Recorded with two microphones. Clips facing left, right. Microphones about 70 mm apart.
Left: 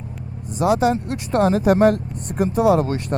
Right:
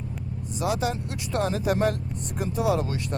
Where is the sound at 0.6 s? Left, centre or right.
Left.